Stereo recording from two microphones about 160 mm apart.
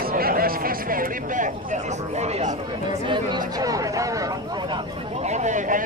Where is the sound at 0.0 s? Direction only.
65° right (ahead or behind); by 2.5 s 45° right (ahead or behind).